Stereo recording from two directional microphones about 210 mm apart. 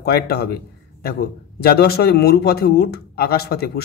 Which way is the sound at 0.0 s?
50° left (ahead or behind).